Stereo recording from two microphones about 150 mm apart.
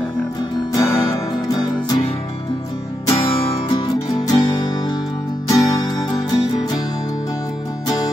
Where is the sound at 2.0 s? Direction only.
40° left (ahead or behind).